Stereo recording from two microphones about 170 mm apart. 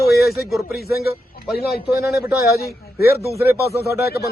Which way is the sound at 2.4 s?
65° left (ahead or behind).